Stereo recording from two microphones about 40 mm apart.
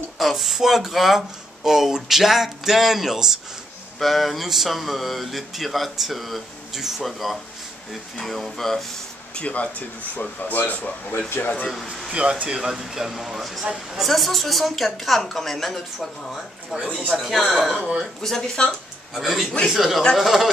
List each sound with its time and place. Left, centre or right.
0.2 s speech: centre
4.0 s speech: centre
9.3 s speech: left
11.1 s speech: left
11.6 s speech: centre
12.1 s speech: right
12.7 s speech: centre
18.2 s speech: centre
18.7 s speech: centre